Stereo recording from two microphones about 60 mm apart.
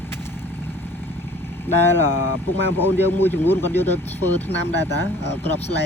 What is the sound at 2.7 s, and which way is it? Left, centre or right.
Speech, left.